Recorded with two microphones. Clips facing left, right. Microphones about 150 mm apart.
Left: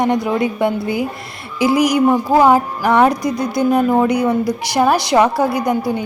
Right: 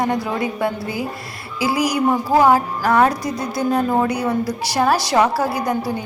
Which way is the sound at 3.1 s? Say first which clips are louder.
Left 5 dB; 30° right (ahead or behind).